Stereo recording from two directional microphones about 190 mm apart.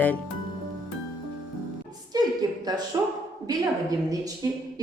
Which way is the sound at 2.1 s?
20° right (ahead or behind).